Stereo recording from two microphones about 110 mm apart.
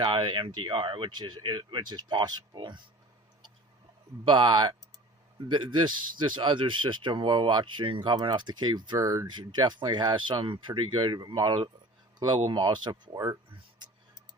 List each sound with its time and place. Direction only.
0.0 s speech: 45° right (ahead or behind)
4.3 s speech: 45° right (ahead or behind)
9.0 s speech: 30° right (ahead or behind)
9.2 s speech: 45° right (ahead or behind)